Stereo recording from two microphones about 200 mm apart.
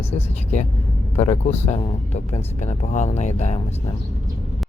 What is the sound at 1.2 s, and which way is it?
Speech, 35° left (ahead or behind).